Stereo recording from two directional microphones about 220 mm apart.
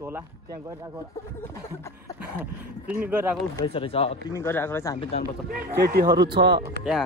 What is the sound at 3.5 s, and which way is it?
Speech, 20° left (ahead or behind).